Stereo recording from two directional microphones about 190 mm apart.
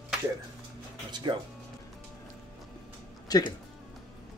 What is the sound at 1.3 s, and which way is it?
Speech, 25° right (ahead or behind).